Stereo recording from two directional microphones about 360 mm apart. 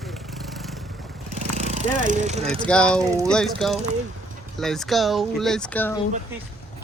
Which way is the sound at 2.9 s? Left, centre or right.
Centre.